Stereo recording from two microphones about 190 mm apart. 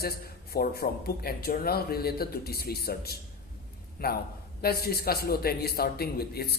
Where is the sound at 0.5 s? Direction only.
55° left (ahead or behind).